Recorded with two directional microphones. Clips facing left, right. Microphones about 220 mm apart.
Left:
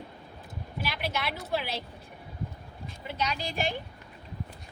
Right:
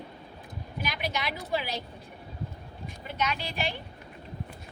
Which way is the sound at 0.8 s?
5° left (ahead or behind).